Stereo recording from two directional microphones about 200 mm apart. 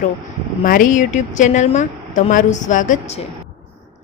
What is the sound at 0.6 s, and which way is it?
A woman's voice, 45° left (ahead or behind).